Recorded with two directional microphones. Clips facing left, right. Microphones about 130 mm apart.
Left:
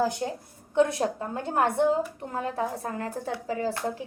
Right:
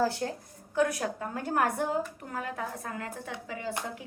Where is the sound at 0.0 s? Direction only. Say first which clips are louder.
Left 2 dB; 20° left (ahead or behind); by 3.8 s 35° left (ahead or behind).